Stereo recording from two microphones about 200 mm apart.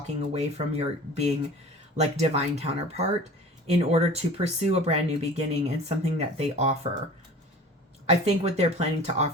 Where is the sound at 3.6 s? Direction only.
30° right (ahead or behind).